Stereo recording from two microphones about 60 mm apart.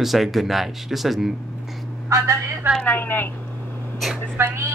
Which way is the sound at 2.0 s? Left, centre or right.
Right.